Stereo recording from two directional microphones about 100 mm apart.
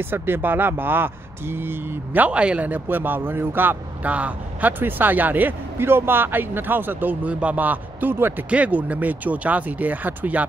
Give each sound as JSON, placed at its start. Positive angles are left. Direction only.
{"t": 0.0, "sound": "speech", "side_deg": -20}